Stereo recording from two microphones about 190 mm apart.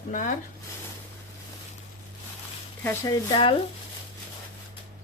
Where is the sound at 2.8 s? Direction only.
15° left (ahead or behind).